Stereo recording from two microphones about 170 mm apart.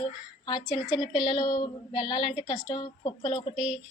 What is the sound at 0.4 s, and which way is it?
Speech, 25° left (ahead or behind).